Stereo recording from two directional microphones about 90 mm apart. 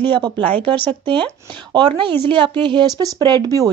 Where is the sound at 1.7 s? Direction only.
60° right (ahead or behind).